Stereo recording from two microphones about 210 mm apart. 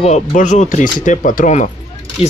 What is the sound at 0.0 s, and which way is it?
Speech, 35° left (ahead or behind).